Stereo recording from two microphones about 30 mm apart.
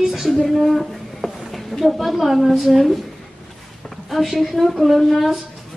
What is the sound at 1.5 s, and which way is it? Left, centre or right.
A woman's voice, centre.